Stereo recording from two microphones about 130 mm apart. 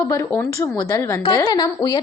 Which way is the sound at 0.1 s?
25° left (ahead or behind).